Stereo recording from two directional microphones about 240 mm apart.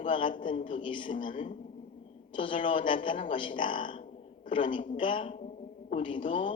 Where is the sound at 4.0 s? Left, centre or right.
Left.